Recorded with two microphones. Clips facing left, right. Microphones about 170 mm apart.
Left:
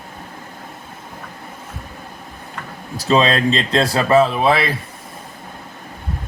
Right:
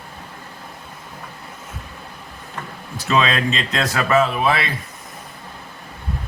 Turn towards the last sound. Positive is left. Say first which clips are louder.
# left 4 dB
turn(degrees=30)  # may be behind; listen again after turning